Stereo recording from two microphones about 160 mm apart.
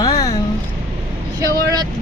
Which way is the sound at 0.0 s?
25° left (ahead or behind).